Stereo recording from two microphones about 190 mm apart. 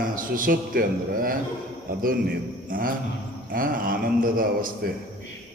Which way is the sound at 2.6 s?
45° right (ahead or behind).